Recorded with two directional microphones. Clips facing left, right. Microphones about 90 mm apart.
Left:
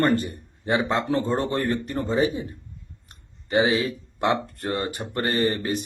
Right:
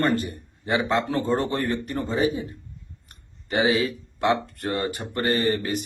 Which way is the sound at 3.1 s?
25° left (ahead or behind).